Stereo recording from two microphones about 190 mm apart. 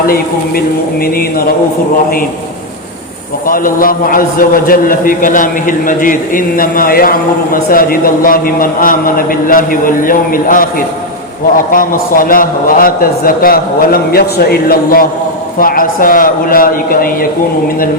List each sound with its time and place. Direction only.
3.4 s a man's voice: 45° left (ahead or behind)